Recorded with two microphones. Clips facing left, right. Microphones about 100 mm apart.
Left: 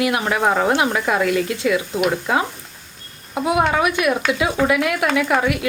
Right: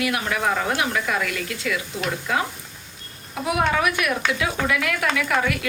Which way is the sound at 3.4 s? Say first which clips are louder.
Left 4 dB; 25° left (ahead or behind).